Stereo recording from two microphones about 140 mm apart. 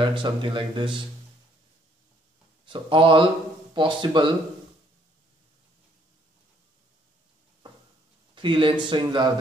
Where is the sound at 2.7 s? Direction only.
40° right (ahead or behind).